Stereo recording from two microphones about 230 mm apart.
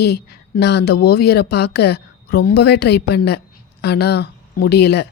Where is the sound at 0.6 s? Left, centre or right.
Left.